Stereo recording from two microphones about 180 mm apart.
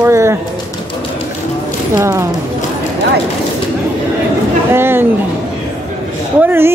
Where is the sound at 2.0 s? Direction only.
15° right (ahead or behind).